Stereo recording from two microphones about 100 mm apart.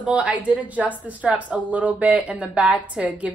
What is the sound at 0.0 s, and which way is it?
A woman's voice, 15° right (ahead or behind).